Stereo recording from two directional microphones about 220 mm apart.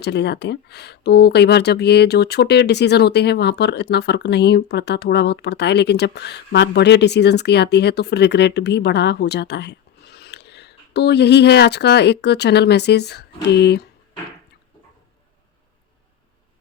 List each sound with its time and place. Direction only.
0.0 s speech: 50° left (ahead or behind)